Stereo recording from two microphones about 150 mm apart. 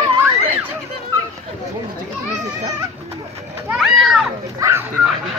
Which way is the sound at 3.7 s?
Centre (ahead or behind).